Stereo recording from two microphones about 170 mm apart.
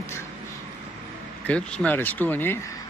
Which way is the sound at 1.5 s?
5° left (ahead or behind).